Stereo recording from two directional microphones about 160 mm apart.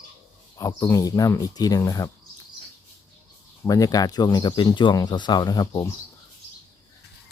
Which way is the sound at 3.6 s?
20° left (ahead or behind).